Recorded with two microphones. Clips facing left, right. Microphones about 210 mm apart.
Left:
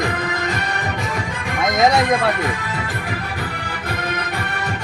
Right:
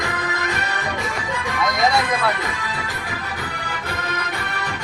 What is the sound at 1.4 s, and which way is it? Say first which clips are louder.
Music: left 4 dB; 50° left (ahead or behind).